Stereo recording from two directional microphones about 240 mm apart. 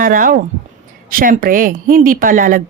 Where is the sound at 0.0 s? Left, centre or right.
Right.